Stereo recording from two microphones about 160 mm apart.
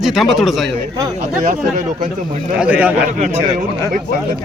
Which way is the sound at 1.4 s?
55° right (ahead or behind).